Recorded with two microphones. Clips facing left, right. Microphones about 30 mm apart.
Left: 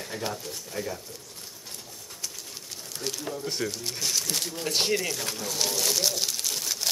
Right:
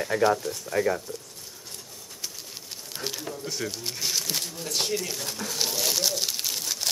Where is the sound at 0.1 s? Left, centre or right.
Centre.